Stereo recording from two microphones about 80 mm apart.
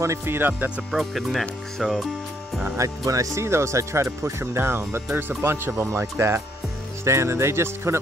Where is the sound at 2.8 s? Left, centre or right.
Right.